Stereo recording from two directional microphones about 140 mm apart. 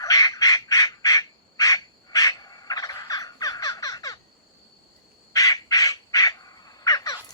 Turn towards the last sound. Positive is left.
turn(degrees=25)  # may be behind; listen again after turning